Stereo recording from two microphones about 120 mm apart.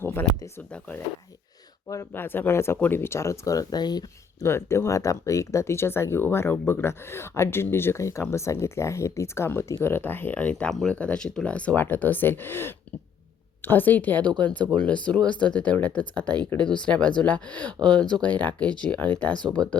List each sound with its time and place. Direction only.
0.0 s a sound: 20° left (ahead or behind)
1.9 s speech: 20° left (ahead or behind)
4.4 s speech: 20° left (ahead or behind)